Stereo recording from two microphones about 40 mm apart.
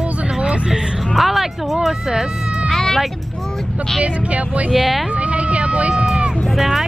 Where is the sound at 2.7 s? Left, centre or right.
Centre.